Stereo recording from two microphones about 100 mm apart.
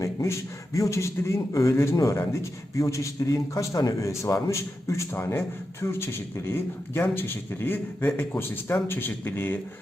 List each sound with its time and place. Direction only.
0.0 s a man's voice: 30° left (ahead or behind)